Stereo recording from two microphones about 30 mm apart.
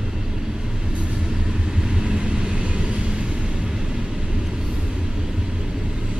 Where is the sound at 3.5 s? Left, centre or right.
Right.